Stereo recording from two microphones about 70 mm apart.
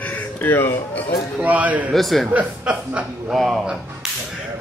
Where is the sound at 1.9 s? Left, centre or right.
Centre.